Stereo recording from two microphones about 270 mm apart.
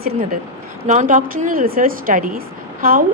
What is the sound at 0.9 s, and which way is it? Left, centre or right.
Speech, right.